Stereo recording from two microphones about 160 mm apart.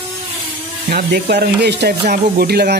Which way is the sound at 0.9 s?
90° right.